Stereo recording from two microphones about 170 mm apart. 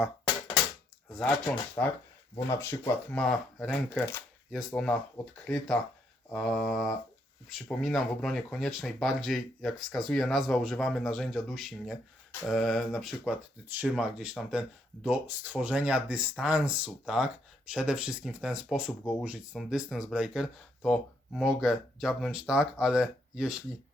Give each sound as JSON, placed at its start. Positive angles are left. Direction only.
{"t": 1.1, "sound": "speech", "side_deg": 5}